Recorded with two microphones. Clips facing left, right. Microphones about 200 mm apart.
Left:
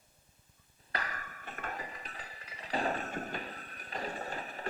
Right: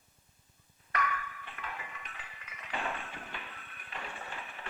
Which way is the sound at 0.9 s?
35° left (ahead or behind).